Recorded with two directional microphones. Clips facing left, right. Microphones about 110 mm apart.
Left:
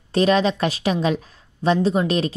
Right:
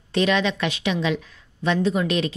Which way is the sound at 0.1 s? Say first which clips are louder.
Left 3 dB; 40° left (ahead or behind).